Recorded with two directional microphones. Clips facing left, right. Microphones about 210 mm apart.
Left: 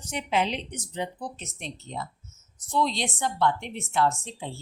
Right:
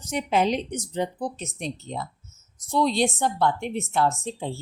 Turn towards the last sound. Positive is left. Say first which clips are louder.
# right 2 dB
turn(degrees=-35)  # may be behind; listen again after turning